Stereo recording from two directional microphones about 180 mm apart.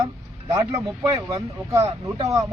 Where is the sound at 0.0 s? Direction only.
15° right (ahead or behind).